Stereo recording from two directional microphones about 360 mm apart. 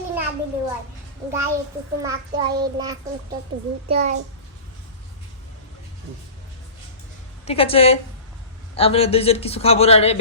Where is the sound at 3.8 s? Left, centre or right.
Centre.